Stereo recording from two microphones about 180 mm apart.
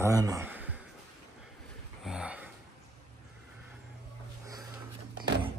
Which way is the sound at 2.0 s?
5° right (ahead or behind).